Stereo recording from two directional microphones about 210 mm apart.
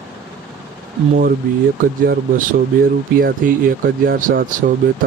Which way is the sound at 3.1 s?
40° right (ahead or behind).